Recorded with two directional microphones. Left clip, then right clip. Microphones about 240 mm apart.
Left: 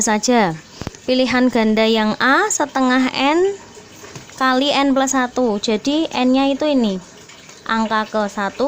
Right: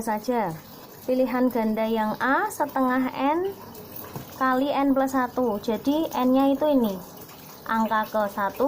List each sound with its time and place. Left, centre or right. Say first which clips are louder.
0.0 s a woman's voice: left 10 dB; left